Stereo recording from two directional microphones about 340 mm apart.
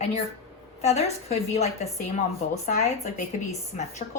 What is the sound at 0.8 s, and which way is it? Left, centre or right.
Speech, centre.